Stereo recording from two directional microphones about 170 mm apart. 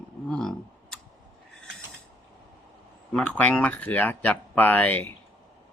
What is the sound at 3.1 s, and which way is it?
Speech, 5° left (ahead or behind).